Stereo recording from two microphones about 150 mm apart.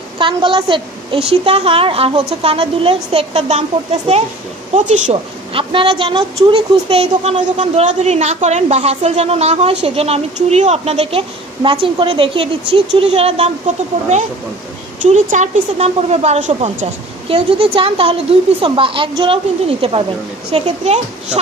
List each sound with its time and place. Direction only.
0.2 s a woman's voice: 35° right (ahead or behind); by 5.1 s 55° right (ahead or behind)
5.5 s a woman's voice: 35° right (ahead or behind)
7.3 s a woman's voice: 50° right (ahead or behind)